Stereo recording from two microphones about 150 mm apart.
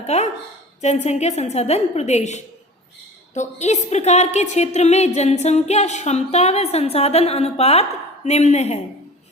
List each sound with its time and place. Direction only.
0.0 s a woman's voice: 45° left (ahead or behind)